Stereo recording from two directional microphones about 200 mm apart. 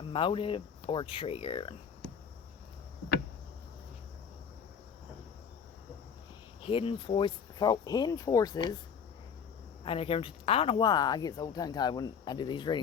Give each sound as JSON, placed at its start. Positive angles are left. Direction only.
{"t": 0.1, "sound": "speech", "side_deg": 25}
{"t": 6.6, "sound": "speech", "side_deg": 25}
{"t": 9.8, "sound": "speech", "side_deg": 25}